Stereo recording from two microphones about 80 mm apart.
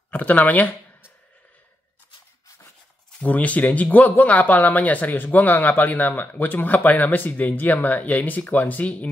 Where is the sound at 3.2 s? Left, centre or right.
Centre.